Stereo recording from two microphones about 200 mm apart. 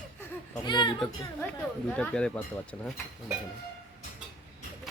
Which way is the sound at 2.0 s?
5° left (ahead or behind).